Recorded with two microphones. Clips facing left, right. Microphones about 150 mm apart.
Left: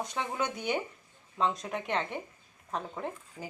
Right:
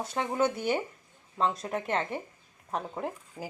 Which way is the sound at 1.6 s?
40° right (ahead or behind).